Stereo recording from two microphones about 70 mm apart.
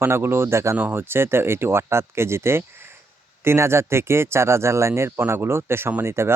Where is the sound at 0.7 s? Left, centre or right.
Right.